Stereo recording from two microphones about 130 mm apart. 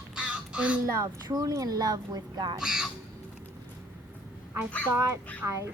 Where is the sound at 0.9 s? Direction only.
30° right (ahead or behind).